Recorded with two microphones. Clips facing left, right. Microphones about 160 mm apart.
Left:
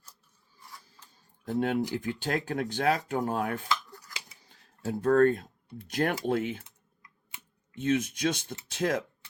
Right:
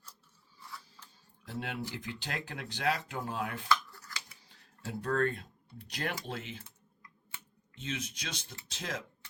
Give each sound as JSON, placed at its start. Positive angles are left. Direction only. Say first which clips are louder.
{"t": 1.5, "sound": "speech", "louder": "left 11 dB", "side_deg": 50}
{"t": 7.8, "sound": "speech", "louder": "left 13 dB", "side_deg": 55}